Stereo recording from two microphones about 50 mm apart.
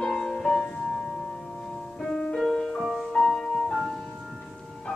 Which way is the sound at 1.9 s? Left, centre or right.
Centre.